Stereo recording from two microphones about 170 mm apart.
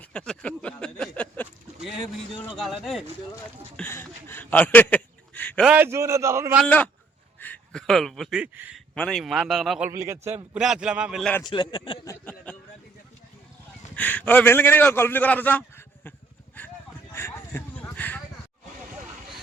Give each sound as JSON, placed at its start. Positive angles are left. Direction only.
{"t": 0.0, "sound": "a sound", "side_deg": 5}
{"t": 2.6, "sound": "a man's voice", "side_deg": 0}
{"t": 3.8, "sound": "speech", "side_deg": 10}
{"t": 5.6, "sound": "a man's voice", "side_deg": -10}
{"t": 6.7, "sound": "a man's voice", "side_deg": 10}
{"t": 9.9, "sound": "a man's voice", "side_deg": -15}
{"t": 11.4, "sound": "a man's voice", "side_deg": 25}
{"t": 12.2, "sound": "a man's voice", "side_deg": 10}
{"t": 13.9, "sound": "a man's voice", "side_deg": 10}
{"t": 17.1, "sound": "a sound", "side_deg": 15}